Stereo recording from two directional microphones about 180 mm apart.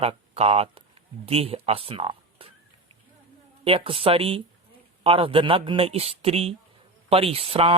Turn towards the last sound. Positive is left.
turn(degrees=-35)  # may be behind; listen again after turning